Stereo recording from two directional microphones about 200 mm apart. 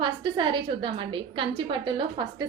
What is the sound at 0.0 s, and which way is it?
A woman's voice, 25° right (ahead or behind).